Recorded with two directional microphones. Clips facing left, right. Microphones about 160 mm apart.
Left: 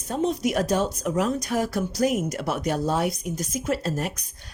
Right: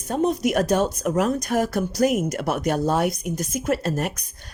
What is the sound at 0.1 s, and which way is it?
Speech, 55° right (ahead or behind).